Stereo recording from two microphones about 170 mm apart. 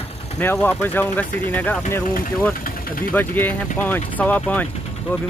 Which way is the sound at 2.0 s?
55° left (ahead or behind).